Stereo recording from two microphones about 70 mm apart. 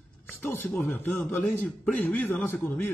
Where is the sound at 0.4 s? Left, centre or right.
Left.